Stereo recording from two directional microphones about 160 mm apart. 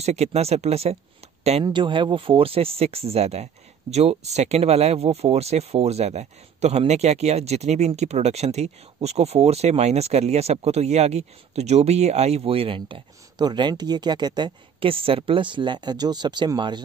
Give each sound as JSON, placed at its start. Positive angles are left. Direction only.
{"t": 0.0, "sound": "speech", "side_deg": -40}
{"t": 1.6, "sound": "speech", "side_deg": -30}